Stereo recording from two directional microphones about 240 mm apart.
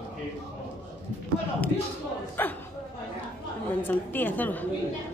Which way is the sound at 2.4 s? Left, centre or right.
Centre.